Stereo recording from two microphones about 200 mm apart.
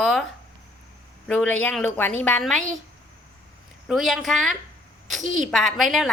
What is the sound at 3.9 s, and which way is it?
A woman's voice, centre (ahead or behind).